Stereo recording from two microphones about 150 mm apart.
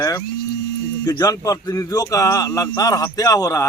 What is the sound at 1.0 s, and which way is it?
Speech, 25° left (ahead or behind).